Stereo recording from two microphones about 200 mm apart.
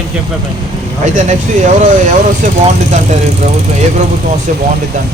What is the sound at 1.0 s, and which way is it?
Speech, 35° right (ahead or behind).